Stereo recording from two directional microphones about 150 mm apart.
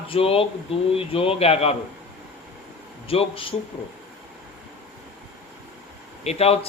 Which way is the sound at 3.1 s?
40° left (ahead or behind).